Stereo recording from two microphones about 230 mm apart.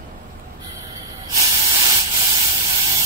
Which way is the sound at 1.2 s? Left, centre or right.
Centre.